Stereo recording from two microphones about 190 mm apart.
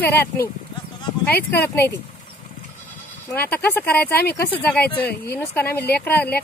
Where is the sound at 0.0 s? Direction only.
10° left (ahead or behind).